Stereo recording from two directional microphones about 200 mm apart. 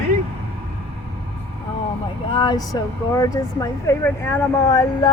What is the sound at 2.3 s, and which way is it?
Vehicle, 25° left (ahead or behind).